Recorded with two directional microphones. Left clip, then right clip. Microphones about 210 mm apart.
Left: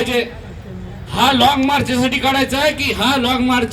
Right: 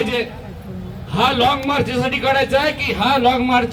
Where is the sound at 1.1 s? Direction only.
60° left (ahead or behind).